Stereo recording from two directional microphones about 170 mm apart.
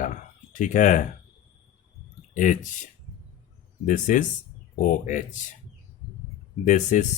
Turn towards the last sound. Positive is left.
turn(degrees=45)  # may be behind; listen again after turning